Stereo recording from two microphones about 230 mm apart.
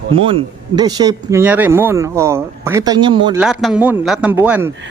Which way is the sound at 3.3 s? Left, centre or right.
Centre.